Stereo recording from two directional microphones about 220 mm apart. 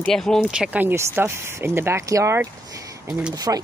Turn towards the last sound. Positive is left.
turn(degrees=-15)  # may be behind; listen again after turning